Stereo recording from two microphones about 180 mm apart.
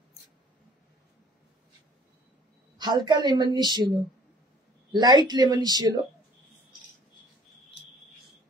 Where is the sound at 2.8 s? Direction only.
25° right (ahead or behind).